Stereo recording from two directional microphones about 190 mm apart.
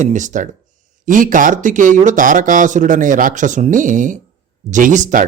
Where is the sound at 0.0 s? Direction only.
40° right (ahead or behind).